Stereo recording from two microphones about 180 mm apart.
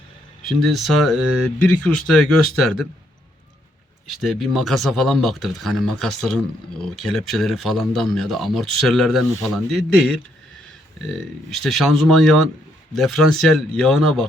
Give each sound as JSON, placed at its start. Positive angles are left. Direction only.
{"t": 0.4, "sound": "speech", "side_deg": 0}
{"t": 4.1, "sound": "speech", "side_deg": 0}
{"t": 11.5, "sound": "speech", "side_deg": 0}